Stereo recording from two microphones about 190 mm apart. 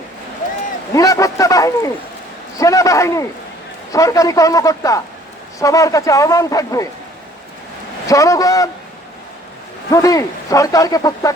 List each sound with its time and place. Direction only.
0.9 s a sound: 15° left (ahead or behind)
2.6 s speech: 15° left (ahead or behind)
8.0 s speech: 15° left (ahead or behind)
9.9 s speech: 15° left (ahead or behind)